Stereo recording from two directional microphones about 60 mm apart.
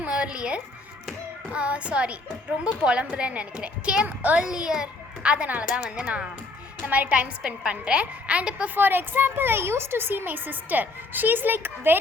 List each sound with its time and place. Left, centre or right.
0.0 s a woman's voice: centre
4.4 s a child's voice: centre
8.7 s a child's voice: right